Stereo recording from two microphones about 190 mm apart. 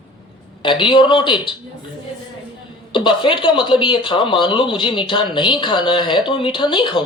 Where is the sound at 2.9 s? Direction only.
25° left (ahead or behind).